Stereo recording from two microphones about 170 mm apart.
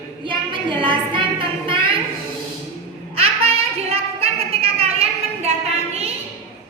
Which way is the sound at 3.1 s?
35° right (ahead or behind).